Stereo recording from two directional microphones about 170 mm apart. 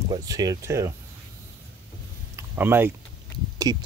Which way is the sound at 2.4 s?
10° right (ahead or behind).